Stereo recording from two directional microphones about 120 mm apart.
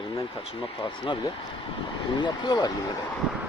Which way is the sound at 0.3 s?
50° left (ahead or behind).